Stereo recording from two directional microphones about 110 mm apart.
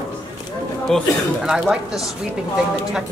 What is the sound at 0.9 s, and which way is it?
Speech, 5° left (ahead or behind).